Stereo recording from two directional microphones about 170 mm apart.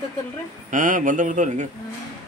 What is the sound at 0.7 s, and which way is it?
Speech, 50° right (ahead or behind).